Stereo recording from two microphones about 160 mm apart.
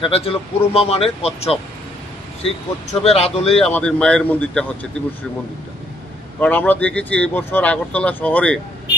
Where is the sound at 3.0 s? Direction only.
40° left (ahead or behind).